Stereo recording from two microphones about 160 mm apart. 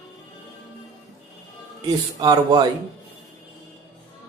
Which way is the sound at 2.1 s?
25° right (ahead or behind).